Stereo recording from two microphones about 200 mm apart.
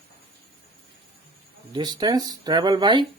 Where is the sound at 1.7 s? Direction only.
20° right (ahead or behind).